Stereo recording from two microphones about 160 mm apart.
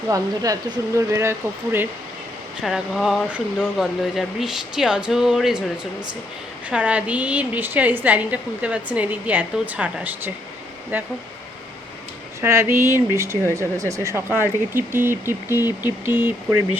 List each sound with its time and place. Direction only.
0.1 s speech: 20° right (ahead or behind)
2.6 s a woman's voice: centre (ahead or behind)
12.4 s a woman's voice: 15° right (ahead or behind)